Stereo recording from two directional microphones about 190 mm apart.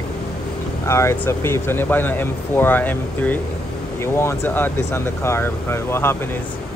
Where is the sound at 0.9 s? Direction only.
15° left (ahead or behind).